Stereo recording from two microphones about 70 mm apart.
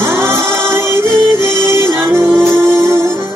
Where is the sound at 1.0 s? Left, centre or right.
Left.